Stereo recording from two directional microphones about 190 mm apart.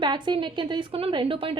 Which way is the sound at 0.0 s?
25° right (ahead or behind).